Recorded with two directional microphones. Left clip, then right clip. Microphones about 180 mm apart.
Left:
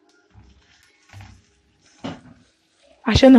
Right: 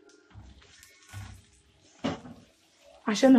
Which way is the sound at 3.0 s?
35° left (ahead or behind).